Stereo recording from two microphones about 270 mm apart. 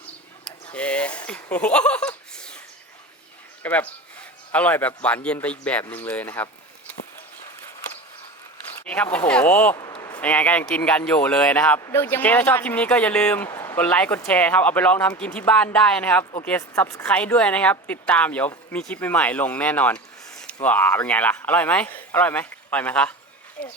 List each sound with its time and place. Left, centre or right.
0.4 s a sound: centre
1.3 s speech: centre
3.6 s speech: centre
8.8 s speech: centre
23.6 s speech: left